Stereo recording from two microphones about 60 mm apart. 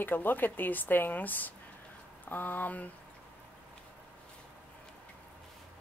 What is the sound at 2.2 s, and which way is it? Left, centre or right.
Speech, left.